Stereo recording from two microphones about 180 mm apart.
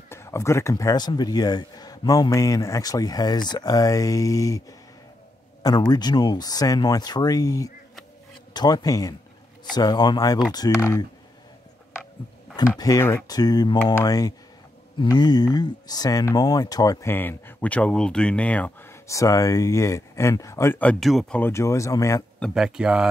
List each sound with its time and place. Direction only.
0.1 s speech: 15° left (ahead or behind)
12.5 s speech: 20° left (ahead or behind)
22.4 s speech: 5° right (ahead or behind)